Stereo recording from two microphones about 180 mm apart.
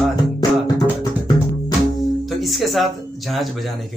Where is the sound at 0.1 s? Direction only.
20° left (ahead or behind).